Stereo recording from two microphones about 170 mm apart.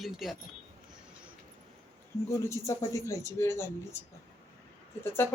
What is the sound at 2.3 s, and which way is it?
Speech, 15° left (ahead or behind).